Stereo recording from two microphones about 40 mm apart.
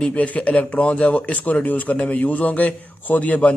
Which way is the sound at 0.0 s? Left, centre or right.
Left.